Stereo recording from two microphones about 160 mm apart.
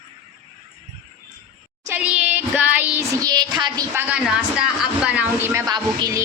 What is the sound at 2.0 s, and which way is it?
Child singing, 5° right (ahead or behind).